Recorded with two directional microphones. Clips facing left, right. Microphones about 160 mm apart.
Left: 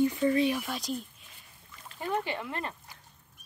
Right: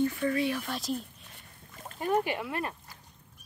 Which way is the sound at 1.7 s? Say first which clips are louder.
Right 5 dB; 45° right (ahead or behind).